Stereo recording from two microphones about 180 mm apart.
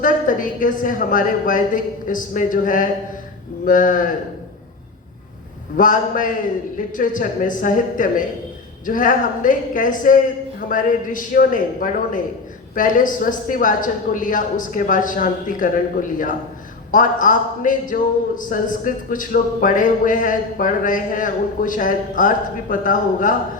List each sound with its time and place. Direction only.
0.0 s a man's voice: 50° left (ahead or behind)
5.7 s a man's voice: 50° left (ahead or behind)